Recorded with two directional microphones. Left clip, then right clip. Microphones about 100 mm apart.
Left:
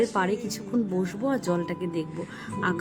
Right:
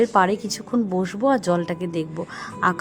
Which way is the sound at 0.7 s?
35° right (ahead or behind).